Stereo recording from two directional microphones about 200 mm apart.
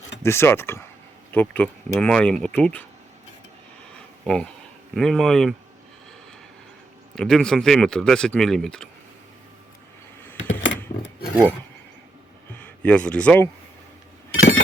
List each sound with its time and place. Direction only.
0.2 s speech: 15° left (ahead or behind)
4.2 s speech: 5° left (ahead or behind)
7.2 s speech: 5° left (ahead or behind)
10.3 s a sound: 70° left (ahead or behind)
12.5 s speech: 5° left (ahead or behind)
14.3 s a sound: 85° left